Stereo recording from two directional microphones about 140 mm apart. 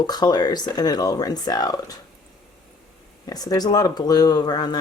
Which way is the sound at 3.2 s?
25° left (ahead or behind).